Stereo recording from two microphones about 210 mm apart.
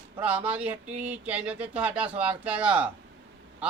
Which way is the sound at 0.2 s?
5° right (ahead or behind).